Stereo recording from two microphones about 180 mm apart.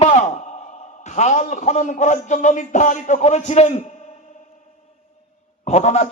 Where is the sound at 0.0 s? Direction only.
40° left (ahead or behind).